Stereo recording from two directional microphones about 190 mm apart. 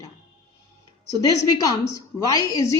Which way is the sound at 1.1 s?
20° left (ahead or behind).